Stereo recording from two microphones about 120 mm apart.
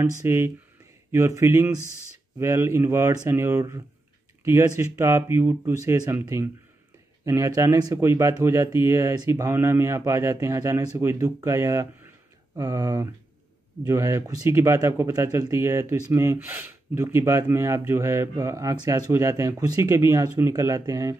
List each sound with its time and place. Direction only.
0.2 s speech: 20° right (ahead or behind)